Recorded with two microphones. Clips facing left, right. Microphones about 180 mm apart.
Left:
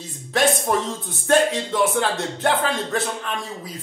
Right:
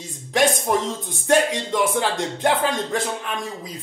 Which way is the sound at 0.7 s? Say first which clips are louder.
Right 1 dB; 10° right (ahead or behind).